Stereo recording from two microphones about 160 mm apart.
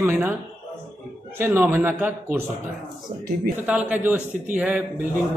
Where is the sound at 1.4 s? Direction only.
15° right (ahead or behind).